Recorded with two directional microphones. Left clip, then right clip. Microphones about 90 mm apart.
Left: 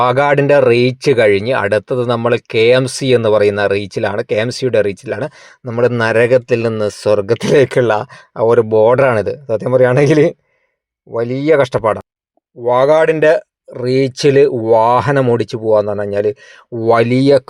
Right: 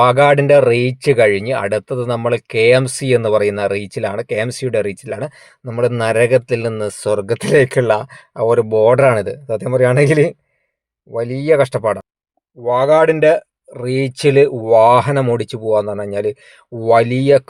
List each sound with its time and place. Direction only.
0.0 s speech: 35° left (ahead or behind)
12.6 s speech: 50° left (ahead or behind); by 17.1 s 30° left (ahead or behind)
17.1 s speech: 60° left (ahead or behind)